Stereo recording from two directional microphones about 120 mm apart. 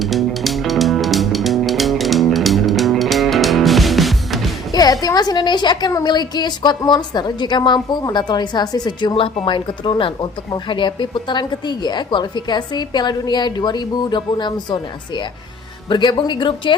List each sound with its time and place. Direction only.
0.0 s music: centre (ahead or behind)
4.7 s a woman's voice: 30° left (ahead or behind)